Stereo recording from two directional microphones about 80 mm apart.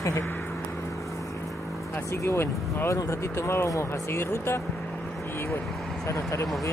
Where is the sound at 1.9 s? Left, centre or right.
Left.